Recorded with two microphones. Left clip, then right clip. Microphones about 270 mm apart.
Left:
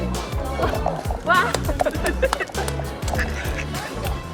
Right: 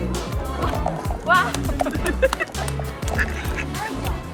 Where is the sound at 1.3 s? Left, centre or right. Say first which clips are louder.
Right 1 dB; left.